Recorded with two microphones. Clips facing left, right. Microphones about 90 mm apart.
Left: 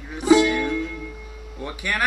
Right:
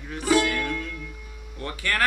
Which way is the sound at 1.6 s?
15° left (ahead or behind).